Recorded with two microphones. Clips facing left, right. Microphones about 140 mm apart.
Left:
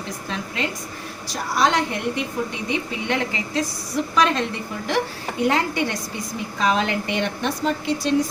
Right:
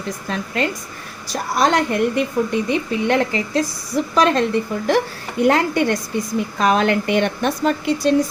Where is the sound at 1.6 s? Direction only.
45° right (ahead or behind).